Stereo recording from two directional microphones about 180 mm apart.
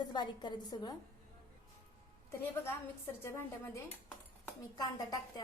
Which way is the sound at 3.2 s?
15° left (ahead or behind).